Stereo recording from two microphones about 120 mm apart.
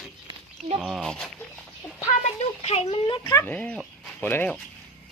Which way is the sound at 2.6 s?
60° left (ahead or behind).